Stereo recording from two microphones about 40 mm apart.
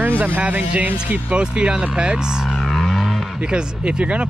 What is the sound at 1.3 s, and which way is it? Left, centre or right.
Speech, right.